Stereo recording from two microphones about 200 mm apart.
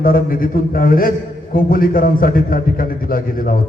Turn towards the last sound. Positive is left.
turn(degrees=45)  # may be behind; listen again after turning